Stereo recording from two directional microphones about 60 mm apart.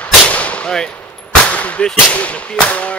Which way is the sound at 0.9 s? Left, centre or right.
Left.